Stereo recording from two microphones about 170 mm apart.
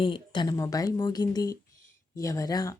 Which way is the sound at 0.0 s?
30° left (ahead or behind).